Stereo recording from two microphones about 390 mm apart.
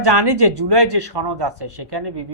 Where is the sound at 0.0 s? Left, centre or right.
Right.